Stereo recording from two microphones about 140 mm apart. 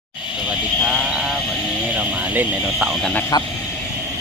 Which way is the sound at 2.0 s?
10° right (ahead or behind).